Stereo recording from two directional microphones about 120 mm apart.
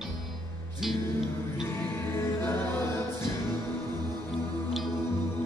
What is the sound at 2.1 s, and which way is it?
Music, 20° left (ahead or behind).